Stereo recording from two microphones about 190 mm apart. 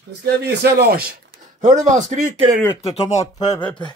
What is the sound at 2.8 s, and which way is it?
Speech, 35° left (ahead or behind).